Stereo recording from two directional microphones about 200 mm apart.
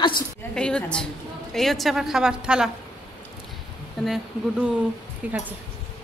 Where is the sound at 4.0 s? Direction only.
Centre (ahead or behind).